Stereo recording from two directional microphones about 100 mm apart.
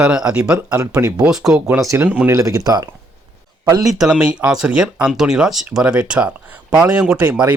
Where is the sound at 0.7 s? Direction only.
35° right (ahead or behind).